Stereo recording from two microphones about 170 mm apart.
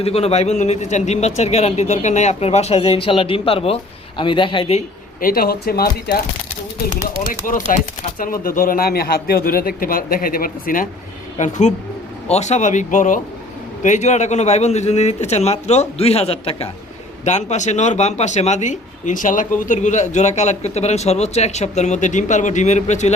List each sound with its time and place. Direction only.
0.0 s a man's voice: 35° left (ahead or behind)
5.2 s a man's voice: 60° left (ahead or behind)
7.4 s a man's voice: 55° left (ahead or behind)
11.3 s a man's voice: 45° left (ahead or behind)